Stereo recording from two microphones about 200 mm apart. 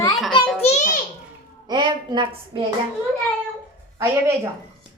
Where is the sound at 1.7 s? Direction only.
20° right (ahead or behind).